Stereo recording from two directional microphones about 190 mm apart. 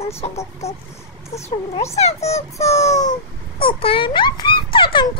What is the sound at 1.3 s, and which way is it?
A child's voice, 35° left (ahead or behind).